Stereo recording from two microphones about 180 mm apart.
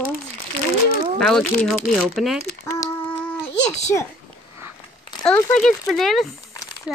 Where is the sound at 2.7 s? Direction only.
15° left (ahead or behind).